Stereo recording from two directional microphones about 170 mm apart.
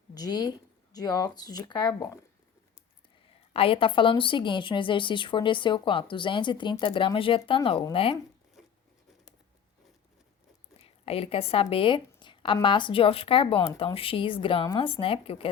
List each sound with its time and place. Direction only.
0.1 s speech: 25° left (ahead or behind)
3.5 s speech: 35° left (ahead or behind)
10.8 s speech: 35° left (ahead or behind)